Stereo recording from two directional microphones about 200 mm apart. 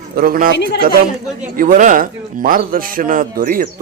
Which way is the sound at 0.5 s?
60° left (ahead or behind).